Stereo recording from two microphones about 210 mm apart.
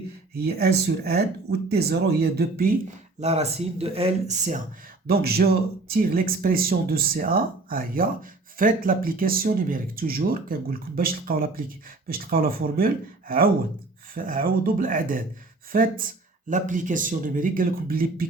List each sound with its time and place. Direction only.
0.3 s speech: 50° right (ahead or behind)
3.2 s speech: 30° right (ahead or behind)
5.0 s speech: 45° right (ahead or behind)